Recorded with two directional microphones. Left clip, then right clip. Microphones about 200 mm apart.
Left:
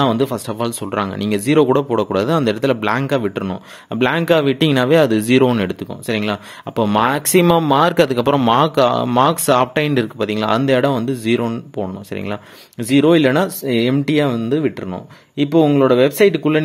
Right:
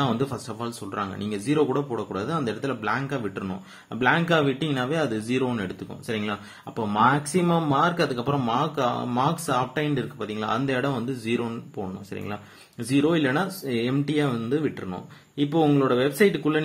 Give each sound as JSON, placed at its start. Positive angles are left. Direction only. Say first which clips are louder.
{"t": 0.0, "sound": "speech", "louder": "left 10 dB", "side_deg": 45}
{"t": 12.8, "sound": "speech", "louder": "left 10 dB", "side_deg": 45}